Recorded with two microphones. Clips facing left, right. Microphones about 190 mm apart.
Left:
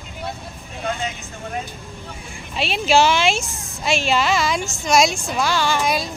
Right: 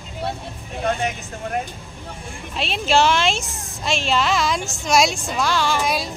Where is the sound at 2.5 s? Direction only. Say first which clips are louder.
Left 2 dB; 5° left (ahead or behind).